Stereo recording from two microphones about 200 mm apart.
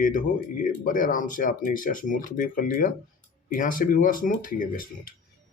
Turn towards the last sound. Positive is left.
turn(degrees=45)  # may be behind; listen again after turning